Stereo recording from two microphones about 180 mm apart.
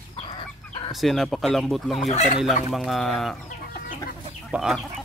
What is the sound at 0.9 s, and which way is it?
Speech, centre (ahead or behind).